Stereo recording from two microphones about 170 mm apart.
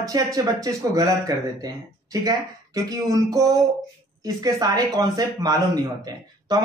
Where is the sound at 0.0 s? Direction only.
20° right (ahead or behind).